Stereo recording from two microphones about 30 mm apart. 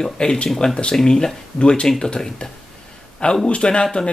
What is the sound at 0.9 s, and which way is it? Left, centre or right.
Speech, left.